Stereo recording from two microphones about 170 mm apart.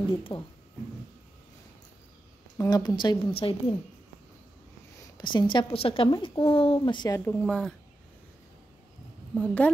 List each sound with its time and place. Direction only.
0.2 s speech: 30° left (ahead or behind)
2.5 s speech: 20° left (ahead or behind)
5.1 s speech: 25° left (ahead or behind)
6.5 s speech: 30° left (ahead or behind)
7.2 s a woman's voice: 10° left (ahead or behind)
9.3 s a woman's voice: 10° left (ahead or behind)